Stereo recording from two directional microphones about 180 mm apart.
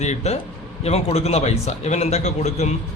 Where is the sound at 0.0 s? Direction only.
40° left (ahead or behind).